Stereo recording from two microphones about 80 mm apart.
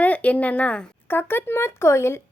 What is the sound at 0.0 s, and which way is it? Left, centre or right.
A woman's voice, centre.